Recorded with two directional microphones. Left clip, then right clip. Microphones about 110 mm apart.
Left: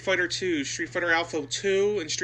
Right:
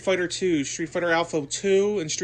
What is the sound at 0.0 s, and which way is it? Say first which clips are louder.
Speech: right 2 dB; 45° right (ahead or behind).